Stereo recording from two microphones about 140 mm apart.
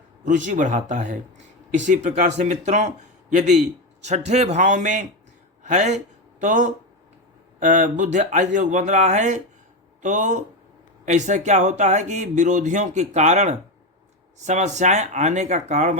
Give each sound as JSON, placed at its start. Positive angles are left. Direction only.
{"t": 0.3, "sound": "speech", "side_deg": -65}
{"t": 4.0, "sound": "speech", "side_deg": -55}